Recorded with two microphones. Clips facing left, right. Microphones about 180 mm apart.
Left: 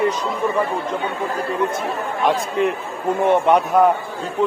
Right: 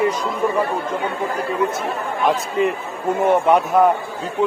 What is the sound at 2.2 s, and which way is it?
A man's voice, centre (ahead or behind).